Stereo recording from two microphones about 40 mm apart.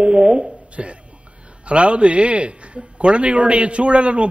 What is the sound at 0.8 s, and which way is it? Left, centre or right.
A man's voice, right.